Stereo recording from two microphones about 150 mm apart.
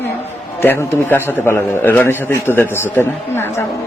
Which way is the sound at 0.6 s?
15° left (ahead or behind).